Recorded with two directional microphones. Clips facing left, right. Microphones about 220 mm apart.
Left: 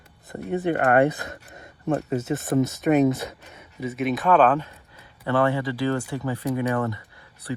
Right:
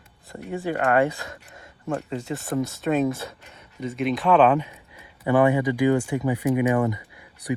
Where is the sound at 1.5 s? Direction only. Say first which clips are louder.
Left 5 dB; 20° left (ahead or behind).